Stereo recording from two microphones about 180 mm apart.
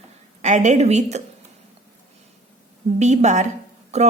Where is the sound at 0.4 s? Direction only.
40° right (ahead or behind).